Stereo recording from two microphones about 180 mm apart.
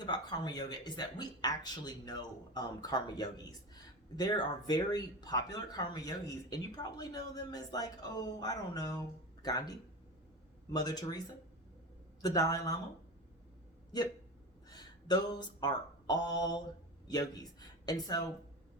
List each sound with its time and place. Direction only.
0.0 s speech: 25° left (ahead or behind)
12.2 s speech: 20° left (ahead or behind)
14.7 s speech: 20° left (ahead or behind)